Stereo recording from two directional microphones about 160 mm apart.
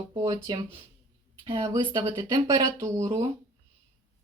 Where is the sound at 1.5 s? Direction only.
25° right (ahead or behind).